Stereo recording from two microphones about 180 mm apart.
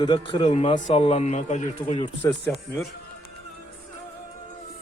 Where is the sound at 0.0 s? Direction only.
25° left (ahead or behind).